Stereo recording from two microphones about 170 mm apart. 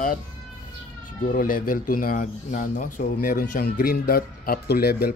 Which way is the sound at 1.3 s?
55° left (ahead or behind).